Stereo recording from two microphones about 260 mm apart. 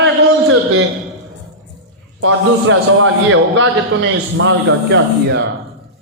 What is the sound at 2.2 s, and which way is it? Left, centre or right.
A man's voice, right.